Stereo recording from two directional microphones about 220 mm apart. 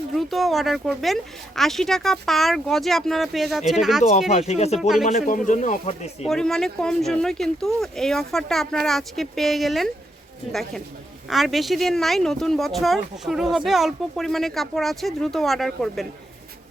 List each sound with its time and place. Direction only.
0.2 s speech: centre (ahead or behind)
4.3 s speech: 30° left (ahead or behind)
4.8 s speech: centre (ahead or behind)
5.0 s speech: 35° left (ahead or behind)
6.2 s speech: centre (ahead or behind)
11.3 s speech: centre (ahead or behind)